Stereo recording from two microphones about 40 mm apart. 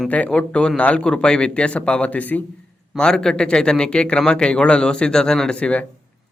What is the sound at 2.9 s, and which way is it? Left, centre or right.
Speech, centre.